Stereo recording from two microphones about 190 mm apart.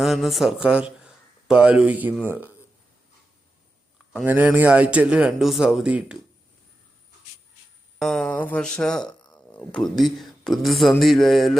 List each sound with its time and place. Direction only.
0.0 s speech: centre (ahead or behind)
4.1 s speech: 5° right (ahead or behind)
7.9 s speech: 5° left (ahead or behind)